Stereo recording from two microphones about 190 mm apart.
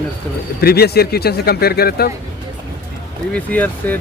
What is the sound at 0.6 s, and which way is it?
Speech, 55° left (ahead or behind).